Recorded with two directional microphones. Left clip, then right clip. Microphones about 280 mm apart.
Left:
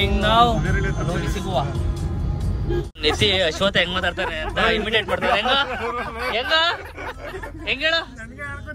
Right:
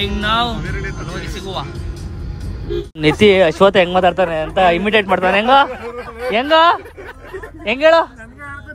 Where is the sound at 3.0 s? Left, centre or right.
Centre.